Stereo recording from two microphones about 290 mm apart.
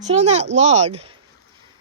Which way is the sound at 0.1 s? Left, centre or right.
Right.